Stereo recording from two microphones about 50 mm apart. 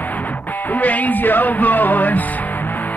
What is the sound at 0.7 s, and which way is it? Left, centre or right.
Music, left.